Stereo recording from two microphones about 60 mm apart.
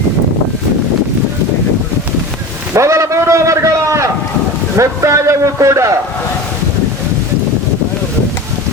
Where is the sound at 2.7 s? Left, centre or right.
Right.